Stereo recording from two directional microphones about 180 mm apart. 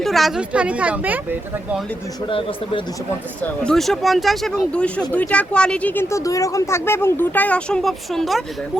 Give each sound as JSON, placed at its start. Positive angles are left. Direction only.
{"t": 0.0, "sound": "speech", "side_deg": 0}
{"t": 2.2, "sound": "speech", "side_deg": 30}
{"t": 3.4, "sound": "speech", "side_deg": 5}